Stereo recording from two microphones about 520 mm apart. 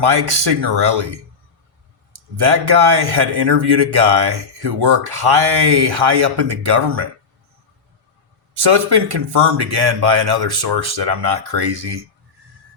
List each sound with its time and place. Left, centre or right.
0.0 s speech: right
2.3 s speech: right
8.5 s speech: right